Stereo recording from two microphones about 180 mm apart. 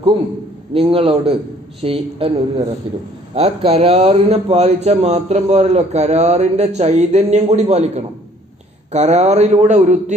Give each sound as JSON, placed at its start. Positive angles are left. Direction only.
{"t": 0.7, "sound": "a man's voice", "side_deg": -30}